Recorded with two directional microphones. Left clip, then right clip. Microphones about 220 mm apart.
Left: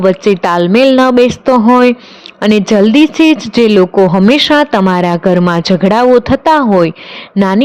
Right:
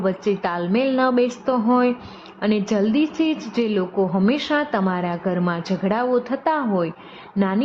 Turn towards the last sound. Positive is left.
turn(degrees=35)  # may be behind; listen again after turning